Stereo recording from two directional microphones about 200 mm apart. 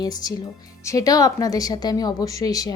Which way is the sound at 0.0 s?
20° left (ahead or behind).